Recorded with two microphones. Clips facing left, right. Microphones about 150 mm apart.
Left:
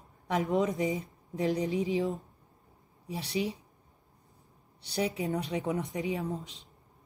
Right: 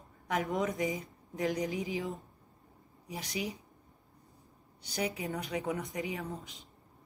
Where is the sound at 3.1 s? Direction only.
30° left (ahead or behind).